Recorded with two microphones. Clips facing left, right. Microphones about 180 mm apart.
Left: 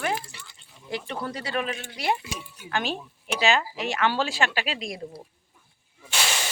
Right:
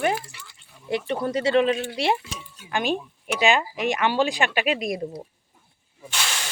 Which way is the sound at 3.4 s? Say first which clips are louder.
Right 3 dB; 15° right (ahead or behind).